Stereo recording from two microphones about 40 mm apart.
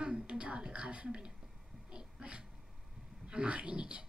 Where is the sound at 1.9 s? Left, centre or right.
Right.